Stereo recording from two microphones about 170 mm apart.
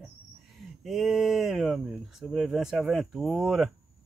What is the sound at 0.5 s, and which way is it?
Speech, centre (ahead or behind).